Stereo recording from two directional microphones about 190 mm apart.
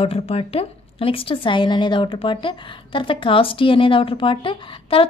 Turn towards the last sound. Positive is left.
turn(degrees=30)  # may be behind; listen again after turning